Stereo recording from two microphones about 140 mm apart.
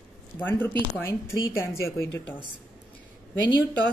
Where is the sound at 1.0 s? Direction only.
20° left (ahead or behind).